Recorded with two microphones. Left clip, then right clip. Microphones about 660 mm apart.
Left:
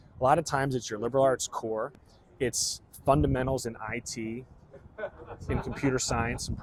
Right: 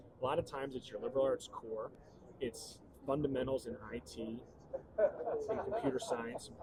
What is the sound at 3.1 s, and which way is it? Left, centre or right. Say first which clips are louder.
Speech: left 10 dB; left.